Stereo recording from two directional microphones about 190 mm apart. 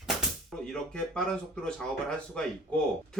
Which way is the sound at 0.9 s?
5° left (ahead or behind).